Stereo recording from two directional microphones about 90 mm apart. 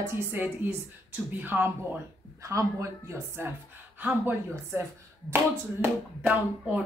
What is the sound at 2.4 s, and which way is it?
A woman's voice, 35° right (ahead or behind).